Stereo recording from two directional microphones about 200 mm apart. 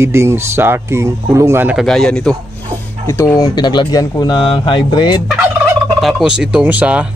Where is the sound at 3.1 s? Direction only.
15° left (ahead or behind).